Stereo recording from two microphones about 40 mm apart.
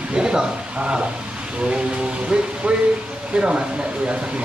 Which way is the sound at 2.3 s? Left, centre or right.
Right.